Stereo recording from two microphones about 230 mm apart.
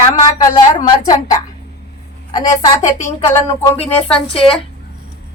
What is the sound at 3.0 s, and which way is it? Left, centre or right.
Speech, left.